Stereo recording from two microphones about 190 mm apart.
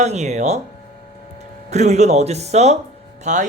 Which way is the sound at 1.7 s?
35° right (ahead or behind).